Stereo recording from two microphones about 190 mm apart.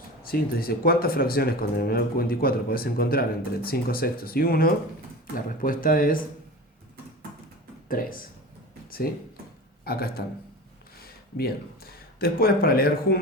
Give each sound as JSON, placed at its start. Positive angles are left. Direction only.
{"t": 0.2, "sound": "speech", "side_deg": 50}
{"t": 7.9, "sound": "speech", "side_deg": 45}
{"t": 9.8, "sound": "a man's voice", "side_deg": 55}